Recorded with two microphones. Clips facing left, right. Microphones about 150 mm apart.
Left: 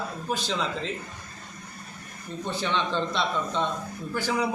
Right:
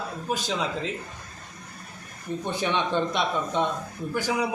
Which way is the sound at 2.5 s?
15° right (ahead or behind).